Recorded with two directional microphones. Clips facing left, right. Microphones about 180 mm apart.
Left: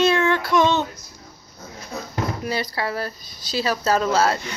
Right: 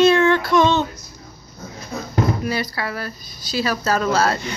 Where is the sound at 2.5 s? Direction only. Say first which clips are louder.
Right 1 dB; 30° left (ahead or behind).